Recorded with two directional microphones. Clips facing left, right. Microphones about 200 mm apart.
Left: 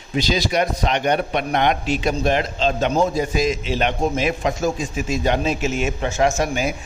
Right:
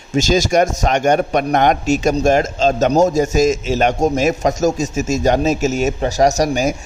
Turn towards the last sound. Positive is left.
turn(degrees=-40)  # may be behind; listen again after turning